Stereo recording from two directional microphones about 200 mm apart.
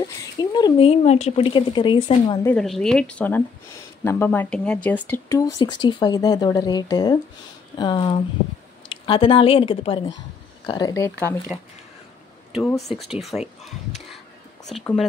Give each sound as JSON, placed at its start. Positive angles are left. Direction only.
{"t": 0.4, "sound": "a woman's voice", "side_deg": 20}
{"t": 2.4, "sound": "a woman's voice", "side_deg": 5}
{"t": 12.9, "sound": "a woman's voice", "side_deg": 0}
{"t": 14.7, "sound": "a woman's voice", "side_deg": 0}